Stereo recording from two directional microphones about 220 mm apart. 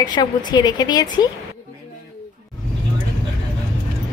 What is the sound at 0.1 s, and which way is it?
A woman's voice, 20° left (ahead or behind).